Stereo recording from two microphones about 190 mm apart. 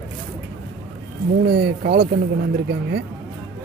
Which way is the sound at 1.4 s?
60° right (ahead or behind).